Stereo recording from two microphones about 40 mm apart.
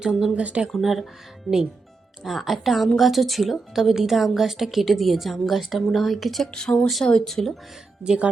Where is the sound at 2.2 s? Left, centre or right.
Centre.